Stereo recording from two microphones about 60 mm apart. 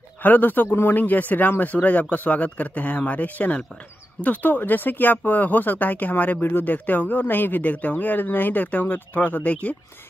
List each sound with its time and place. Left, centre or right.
0.2 s speech: left